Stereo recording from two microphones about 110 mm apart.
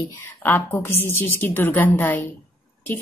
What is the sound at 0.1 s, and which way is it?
A woman's voice, 20° left (ahead or behind).